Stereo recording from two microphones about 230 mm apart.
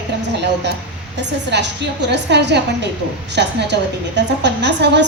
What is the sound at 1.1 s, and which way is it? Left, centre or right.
A woman's voice, right.